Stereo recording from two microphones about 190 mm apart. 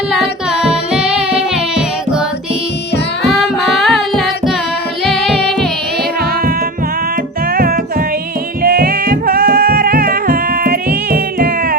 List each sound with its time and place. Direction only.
1.3 s music: 5° right (ahead or behind)
3.2 s music: centre (ahead or behind)
7.5 s music: 50° right (ahead or behind)